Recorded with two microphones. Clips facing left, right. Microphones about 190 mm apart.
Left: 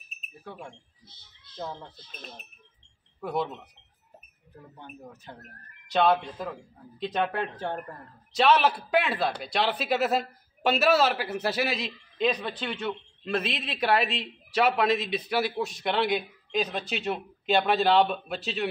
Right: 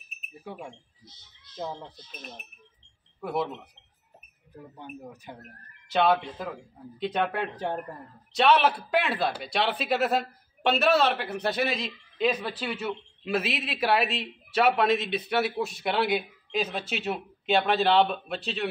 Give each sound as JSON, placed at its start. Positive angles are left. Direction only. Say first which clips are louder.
{"t": 0.4, "sound": "speech", "louder": "right 2 dB", "side_deg": -15}
{"t": 3.2, "sound": "speech", "louder": "even", "side_deg": -5}
{"t": 5.3, "sound": "speech", "louder": "right 1 dB", "side_deg": -15}
{"t": 5.9, "sound": "a man's voice", "louder": "even", "side_deg": -5}
{"t": 7.5, "sound": "speech", "louder": "right 2 dB", "side_deg": -15}
{"t": 8.3, "sound": "a man's voice", "louder": "even", "side_deg": 0}